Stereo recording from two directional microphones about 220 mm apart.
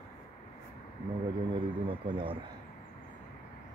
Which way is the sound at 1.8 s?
25° right (ahead or behind).